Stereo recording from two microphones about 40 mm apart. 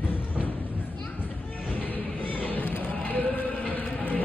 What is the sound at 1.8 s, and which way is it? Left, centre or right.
Music, left.